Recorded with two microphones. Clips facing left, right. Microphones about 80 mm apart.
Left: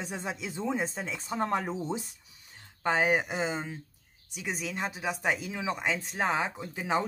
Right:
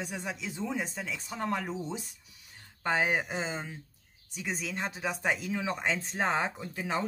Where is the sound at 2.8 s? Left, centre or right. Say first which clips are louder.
Left 2 dB; centre.